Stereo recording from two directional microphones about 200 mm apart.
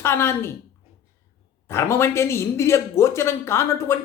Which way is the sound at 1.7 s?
15° left (ahead or behind).